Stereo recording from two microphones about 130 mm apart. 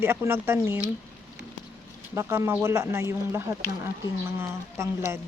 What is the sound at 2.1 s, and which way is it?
A woman's voice, 20° right (ahead or behind).